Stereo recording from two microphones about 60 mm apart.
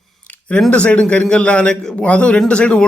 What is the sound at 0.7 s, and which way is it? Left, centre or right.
A man's voice, left.